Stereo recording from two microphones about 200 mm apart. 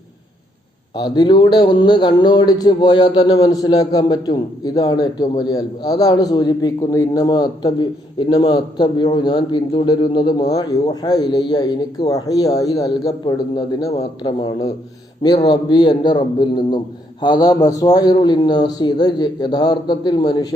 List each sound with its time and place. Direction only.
0.9 s speech: 20° left (ahead or behind)